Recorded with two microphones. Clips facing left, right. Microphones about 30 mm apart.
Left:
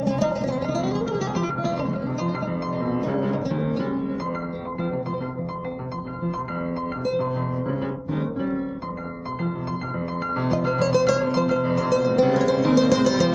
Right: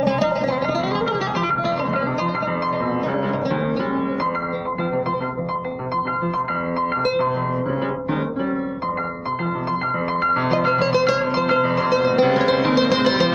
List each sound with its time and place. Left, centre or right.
0.0 s music: right
2.9 s music: right
10.2 s music: right
11.4 s music: right
11.7 s music: right